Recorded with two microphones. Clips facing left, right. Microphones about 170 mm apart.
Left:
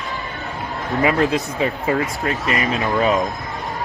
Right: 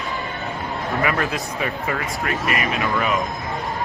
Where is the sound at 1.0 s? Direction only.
25° left (ahead or behind).